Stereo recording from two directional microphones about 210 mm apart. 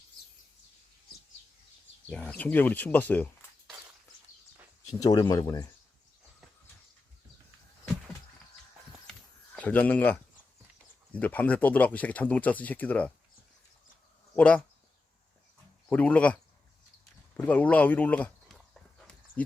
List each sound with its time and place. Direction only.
2.0 s speech: 5° left (ahead or behind)
4.9 s speech: 15° left (ahead or behind)
9.6 s speech: 5° left (ahead or behind)
14.3 s speech: 5° left (ahead or behind)
15.9 s speech: 5° left (ahead or behind)
17.3 s a sound: 5° left (ahead or behind)